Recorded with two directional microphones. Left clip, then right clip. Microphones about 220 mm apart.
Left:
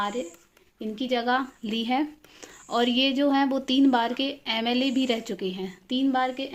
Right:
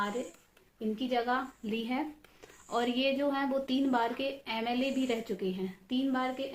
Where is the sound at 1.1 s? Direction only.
50° left (ahead or behind).